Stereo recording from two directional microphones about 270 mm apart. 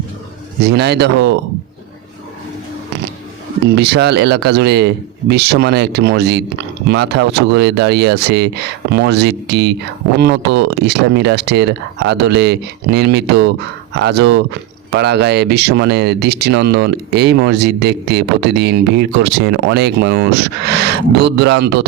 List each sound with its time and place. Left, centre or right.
0.6 s speech: right
3.7 s speech: right